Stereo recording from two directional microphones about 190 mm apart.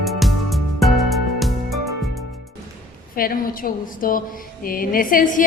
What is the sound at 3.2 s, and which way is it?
A woman's voice, 50° left (ahead or behind).